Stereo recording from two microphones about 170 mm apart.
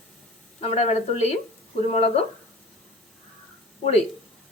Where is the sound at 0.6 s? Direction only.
40° left (ahead or behind).